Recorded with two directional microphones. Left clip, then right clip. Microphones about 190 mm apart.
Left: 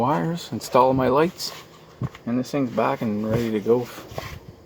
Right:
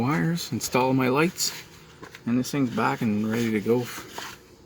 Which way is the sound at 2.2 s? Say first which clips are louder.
Left 1 dB; 40° right (ahead or behind).